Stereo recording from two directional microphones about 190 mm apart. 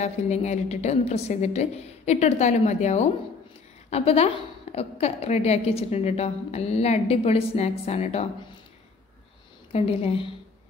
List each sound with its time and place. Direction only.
0.0 s a woman's voice: 35° left (ahead or behind)
9.7 s a woman's voice: 30° left (ahead or behind)